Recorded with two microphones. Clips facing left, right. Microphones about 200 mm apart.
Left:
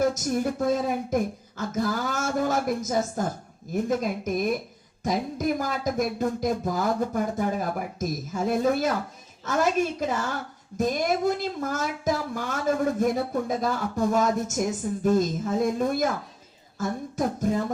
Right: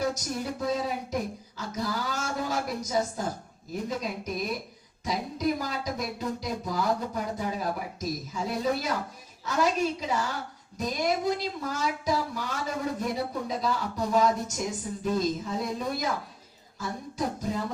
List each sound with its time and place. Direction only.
0.0 s speech: 50° left (ahead or behind)
16.7 s music: 50° left (ahead or behind)